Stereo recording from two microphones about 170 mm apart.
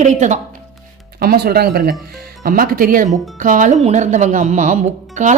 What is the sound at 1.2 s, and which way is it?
Speech, 65° right (ahead or behind).